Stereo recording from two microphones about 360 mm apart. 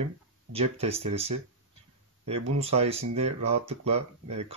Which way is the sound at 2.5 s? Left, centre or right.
Centre.